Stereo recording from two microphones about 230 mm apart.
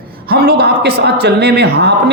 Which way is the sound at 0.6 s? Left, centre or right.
Right.